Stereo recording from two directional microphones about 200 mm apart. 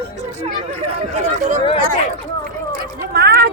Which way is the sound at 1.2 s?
35° right (ahead or behind).